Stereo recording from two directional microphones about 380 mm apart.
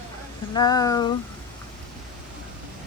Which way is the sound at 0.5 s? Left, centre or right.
Centre.